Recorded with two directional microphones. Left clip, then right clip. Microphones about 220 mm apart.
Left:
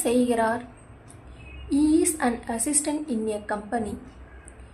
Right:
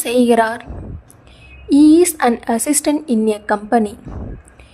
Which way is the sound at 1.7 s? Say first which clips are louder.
Right 12 dB; 45° right (ahead or behind).